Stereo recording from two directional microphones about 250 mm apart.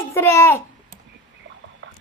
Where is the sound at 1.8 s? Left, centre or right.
Right.